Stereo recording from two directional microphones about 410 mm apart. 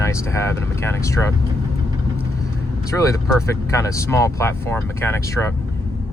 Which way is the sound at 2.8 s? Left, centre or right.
Centre.